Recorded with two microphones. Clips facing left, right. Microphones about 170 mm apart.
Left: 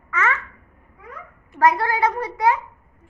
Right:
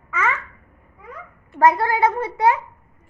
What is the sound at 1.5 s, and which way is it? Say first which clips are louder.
A child's voice: right 2 dB; 25° right (ahead or behind).